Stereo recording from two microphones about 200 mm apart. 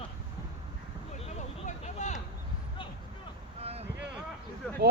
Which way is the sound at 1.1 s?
35° left (ahead or behind).